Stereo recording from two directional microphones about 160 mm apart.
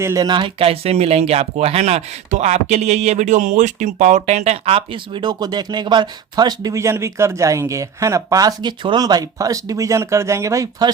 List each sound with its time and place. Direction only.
0.0 s speech: 20° right (ahead or behind)